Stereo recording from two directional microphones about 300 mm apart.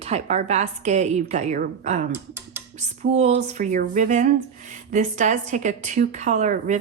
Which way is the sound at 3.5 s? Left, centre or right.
Right.